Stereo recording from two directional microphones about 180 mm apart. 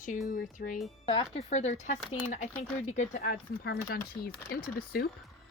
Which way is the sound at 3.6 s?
60° left (ahead or behind).